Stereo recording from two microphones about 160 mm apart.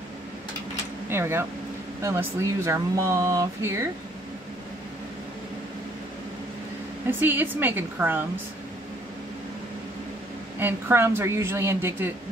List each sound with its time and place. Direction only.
1.0 s speech: 15° right (ahead or behind)
7.1 s speech: 15° right (ahead or behind)
10.6 s speech: 15° right (ahead or behind)